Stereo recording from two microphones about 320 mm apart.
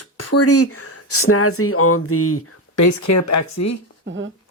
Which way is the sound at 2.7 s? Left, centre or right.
Left.